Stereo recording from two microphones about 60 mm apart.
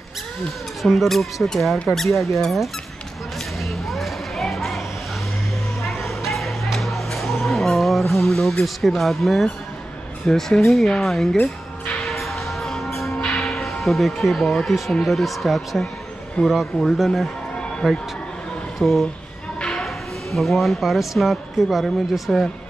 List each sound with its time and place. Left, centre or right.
0.8 s speech: centre
3.6 s a sound: centre
5.8 s music: centre
10.2 s speech: centre
12.0 s music: centre
14.7 s speech: centre